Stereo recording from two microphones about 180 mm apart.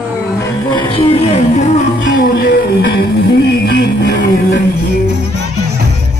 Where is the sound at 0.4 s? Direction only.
25° left (ahead or behind).